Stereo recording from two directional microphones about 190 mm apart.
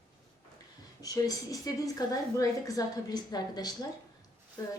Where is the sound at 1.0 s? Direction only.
20° left (ahead or behind).